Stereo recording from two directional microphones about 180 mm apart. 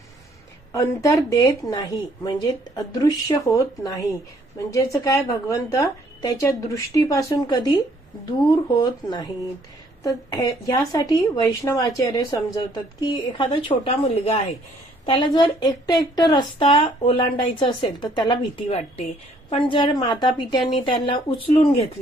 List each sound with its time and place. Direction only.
0.7 s a woman's voice: 20° left (ahead or behind)